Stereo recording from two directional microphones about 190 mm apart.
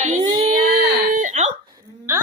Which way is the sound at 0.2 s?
25° right (ahead or behind).